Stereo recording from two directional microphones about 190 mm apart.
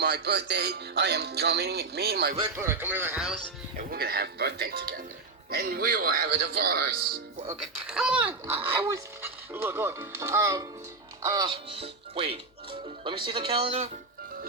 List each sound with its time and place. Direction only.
0.0 s speech: 60° right (ahead or behind)
2.6 s speech: 10° right (ahead or behind)
3.9 s a man's voice: 55° right (ahead or behind)
7.6 s speech: 5° right (ahead or behind); by 13.8 s 30° right (ahead or behind)